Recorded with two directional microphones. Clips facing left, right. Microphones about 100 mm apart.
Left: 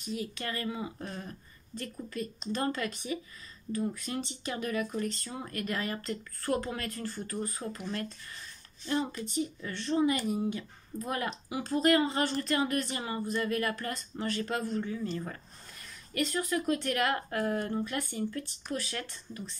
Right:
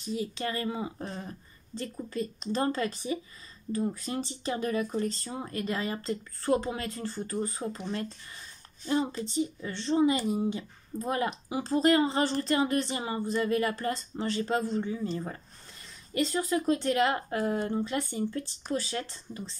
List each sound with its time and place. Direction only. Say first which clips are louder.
0.0 s speech: right 4 dB; 25° right (ahead or behind)
2.5 s speech: right 3 dB; 30° right (ahead or behind)